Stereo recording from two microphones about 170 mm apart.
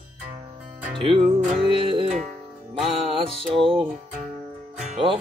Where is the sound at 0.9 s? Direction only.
30° right (ahead or behind).